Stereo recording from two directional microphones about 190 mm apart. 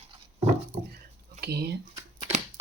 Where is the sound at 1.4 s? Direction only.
60° right (ahead or behind).